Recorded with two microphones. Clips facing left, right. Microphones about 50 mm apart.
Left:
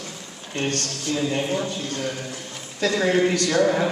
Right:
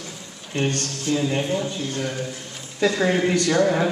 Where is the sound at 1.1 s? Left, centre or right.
Centre.